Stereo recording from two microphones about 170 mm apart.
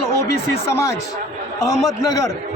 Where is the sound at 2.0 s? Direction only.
20° left (ahead or behind).